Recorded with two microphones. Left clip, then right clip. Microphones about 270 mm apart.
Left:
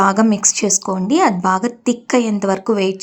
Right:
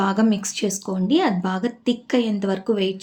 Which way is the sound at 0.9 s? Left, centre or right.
Centre.